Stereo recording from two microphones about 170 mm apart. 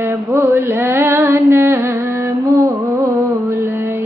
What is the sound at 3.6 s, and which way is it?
Music, 15° right (ahead or behind).